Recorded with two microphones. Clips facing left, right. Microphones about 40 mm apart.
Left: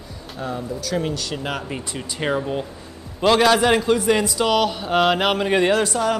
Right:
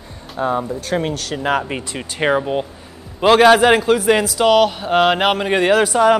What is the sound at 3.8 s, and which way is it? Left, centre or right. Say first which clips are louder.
Speech: right 3 dB; centre.